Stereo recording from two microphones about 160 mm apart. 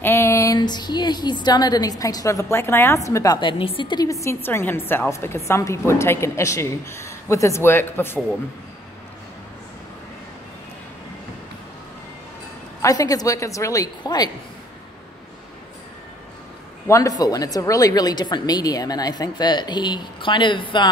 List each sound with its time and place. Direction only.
0.0 s a woman's voice: 15° left (ahead or behind)
3.3 s a woman's voice: 30° left (ahead or behind); by 8.2 s 15° left (ahead or behind)
12.8 s a woman's voice: 20° left (ahead or behind)
16.8 s a woman's voice: 20° left (ahead or behind)